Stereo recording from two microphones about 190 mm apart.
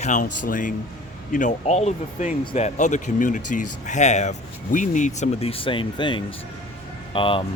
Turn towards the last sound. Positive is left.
turn(degrees=25)  # may be behind; listen again after turning